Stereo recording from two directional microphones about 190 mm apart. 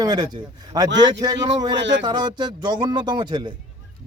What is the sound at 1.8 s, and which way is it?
Speech, 70° right (ahead or behind).